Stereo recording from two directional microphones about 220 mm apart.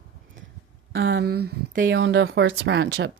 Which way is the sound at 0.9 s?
50° right (ahead or behind).